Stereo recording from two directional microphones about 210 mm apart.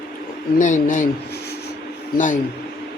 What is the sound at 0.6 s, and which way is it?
Speech, 35° left (ahead or behind).